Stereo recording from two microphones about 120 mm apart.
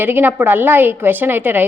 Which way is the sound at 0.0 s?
15° right (ahead or behind).